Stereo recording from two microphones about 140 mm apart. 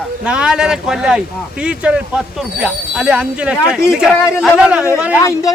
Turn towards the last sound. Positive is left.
turn(degrees=20)  # may be behind; listen again after turning